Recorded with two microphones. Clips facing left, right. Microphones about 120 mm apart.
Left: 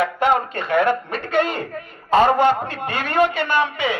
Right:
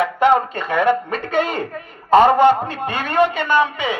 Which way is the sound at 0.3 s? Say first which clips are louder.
Even; 20° right (ahead or behind).